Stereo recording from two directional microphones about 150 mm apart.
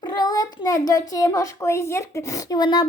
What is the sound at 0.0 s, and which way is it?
A child's voice, 30° left (ahead or behind).